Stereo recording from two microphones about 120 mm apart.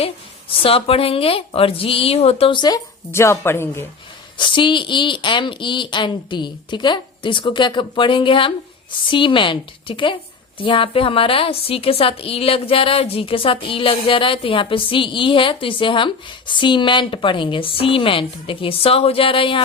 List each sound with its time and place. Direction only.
0.5 s a woman's voice: 50° left (ahead or behind)
3.1 s a woman's voice: 20° left (ahead or behind)
4.4 s a woman's voice: 40° left (ahead or behind)